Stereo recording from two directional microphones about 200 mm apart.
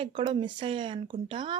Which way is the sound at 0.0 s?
25° right (ahead or behind).